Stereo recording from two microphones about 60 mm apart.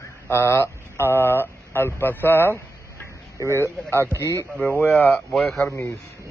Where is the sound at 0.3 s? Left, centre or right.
Left.